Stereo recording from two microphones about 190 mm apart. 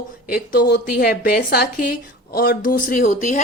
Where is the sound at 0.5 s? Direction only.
50° left (ahead or behind).